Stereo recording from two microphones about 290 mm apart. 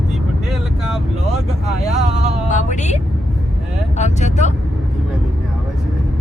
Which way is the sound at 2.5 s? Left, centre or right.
Left.